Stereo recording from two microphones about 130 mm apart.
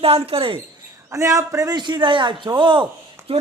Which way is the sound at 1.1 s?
25° right (ahead or behind).